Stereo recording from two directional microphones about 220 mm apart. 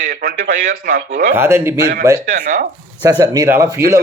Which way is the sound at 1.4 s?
10° right (ahead or behind).